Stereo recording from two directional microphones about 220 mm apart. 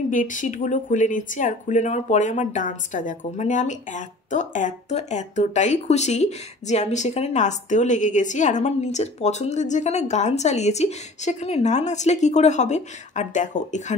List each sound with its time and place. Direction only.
0.1 s speech: 35° left (ahead or behind)